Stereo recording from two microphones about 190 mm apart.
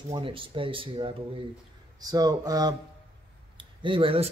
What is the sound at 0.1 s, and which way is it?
Speech, 25° right (ahead or behind).